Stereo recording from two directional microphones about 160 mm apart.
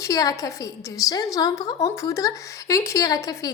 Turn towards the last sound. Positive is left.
turn(degrees=25)  # may be behind; listen again after turning